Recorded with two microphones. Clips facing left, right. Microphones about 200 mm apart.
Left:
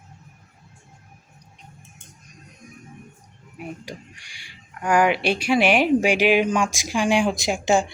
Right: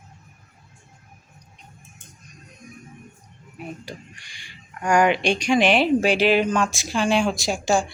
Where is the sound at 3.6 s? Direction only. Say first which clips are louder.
Left 1 dB; 10° left (ahead or behind).